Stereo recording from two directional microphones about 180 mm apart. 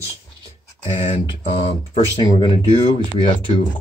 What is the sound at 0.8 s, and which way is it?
Speech, 30° left (ahead or behind).